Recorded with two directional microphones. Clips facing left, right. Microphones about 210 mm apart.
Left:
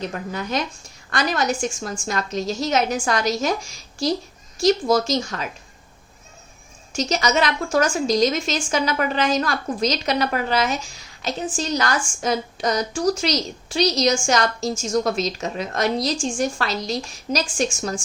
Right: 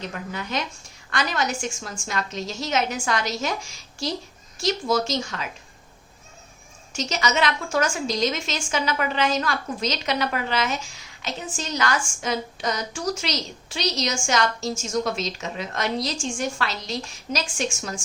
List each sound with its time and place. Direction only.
0.1 s a woman's voice: 40° left (ahead or behind)
4.6 s a woman's voice: 40° left (ahead or behind)
6.9 s a woman's voice: 40° left (ahead or behind)